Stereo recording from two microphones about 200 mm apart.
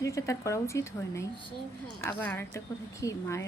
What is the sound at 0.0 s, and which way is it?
Speech, 15° left (ahead or behind).